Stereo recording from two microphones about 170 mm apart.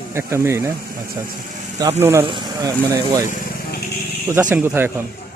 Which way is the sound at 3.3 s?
50° left (ahead or behind).